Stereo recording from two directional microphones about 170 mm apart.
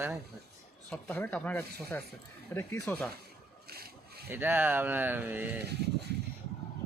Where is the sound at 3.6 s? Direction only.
65° right (ahead or behind).